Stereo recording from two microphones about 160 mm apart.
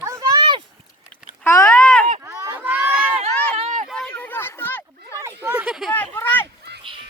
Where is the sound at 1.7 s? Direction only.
5° left (ahead or behind).